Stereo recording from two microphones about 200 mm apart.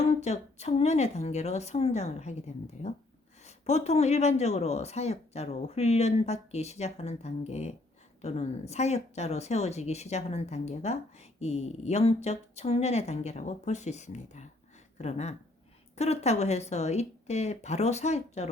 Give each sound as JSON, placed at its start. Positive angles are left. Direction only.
{"t": 0.2, "sound": "speech", "side_deg": 35}
{"t": 3.4, "sound": "speech", "side_deg": 35}